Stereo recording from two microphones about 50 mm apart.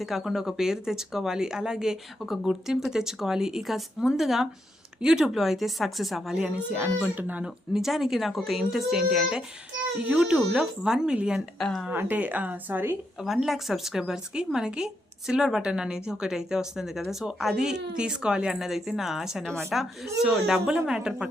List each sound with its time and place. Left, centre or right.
0.0 s a woman's voice: centre
6.3 s a child's voice: centre
7.4 s a woman's voice: centre
11.6 s speech: centre
11.9 s speech: right
13.2 s a woman's voice: centre
19.4 s speech: centre
20.2 s speech: centre